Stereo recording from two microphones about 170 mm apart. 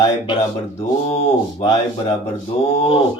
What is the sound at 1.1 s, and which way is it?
Mantra, 35° left (ahead or behind).